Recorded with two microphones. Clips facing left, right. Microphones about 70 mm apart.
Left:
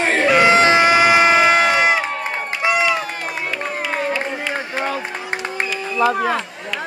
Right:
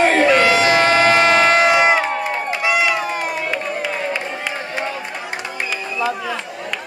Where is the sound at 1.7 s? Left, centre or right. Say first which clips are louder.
Right 2 dB; centre.